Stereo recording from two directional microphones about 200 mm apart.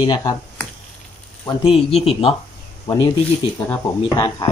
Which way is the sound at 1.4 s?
30° left (ahead or behind).